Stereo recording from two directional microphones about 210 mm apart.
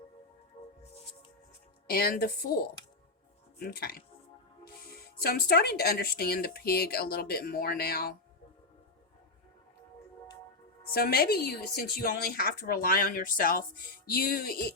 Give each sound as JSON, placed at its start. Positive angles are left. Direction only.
{"t": 1.9, "sound": "a woman's voice", "side_deg": 45}
{"t": 10.8, "sound": "a woman's voice", "side_deg": 45}